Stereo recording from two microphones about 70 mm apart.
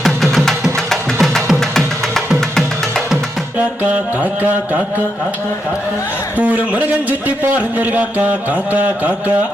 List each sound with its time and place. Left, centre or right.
0.0 s music: centre
3.8 s music: right
6.3 s music: right